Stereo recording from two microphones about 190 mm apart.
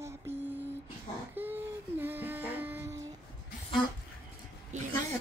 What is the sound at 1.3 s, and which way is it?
Music, 10° right (ahead or behind).